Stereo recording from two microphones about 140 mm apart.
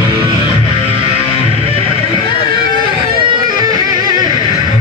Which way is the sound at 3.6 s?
30° right (ahead or behind).